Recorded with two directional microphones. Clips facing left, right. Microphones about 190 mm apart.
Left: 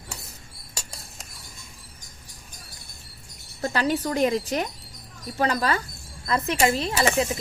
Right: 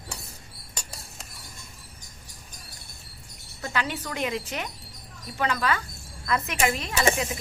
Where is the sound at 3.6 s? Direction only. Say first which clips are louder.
Left 6 dB; 35° left (ahead or behind).